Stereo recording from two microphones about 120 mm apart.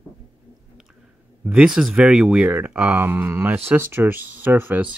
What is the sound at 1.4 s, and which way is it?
Speech, 10° right (ahead or behind).